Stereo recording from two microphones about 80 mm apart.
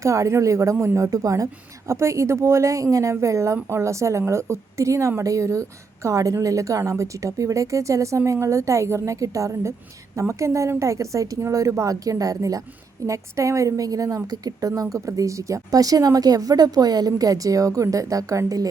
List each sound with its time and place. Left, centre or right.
0.0 s a woman's voice: right